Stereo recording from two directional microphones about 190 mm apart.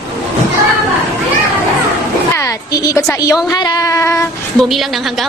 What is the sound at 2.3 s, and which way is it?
Speech, 15° left (ahead or behind).